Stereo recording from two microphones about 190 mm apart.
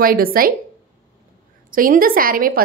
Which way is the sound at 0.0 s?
50° right (ahead or behind).